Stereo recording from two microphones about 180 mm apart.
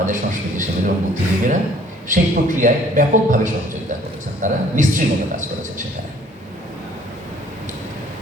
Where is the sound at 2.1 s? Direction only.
45° right (ahead or behind).